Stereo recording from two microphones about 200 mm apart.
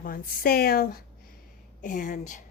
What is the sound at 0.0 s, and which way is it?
A woman's voice, 45° left (ahead or behind).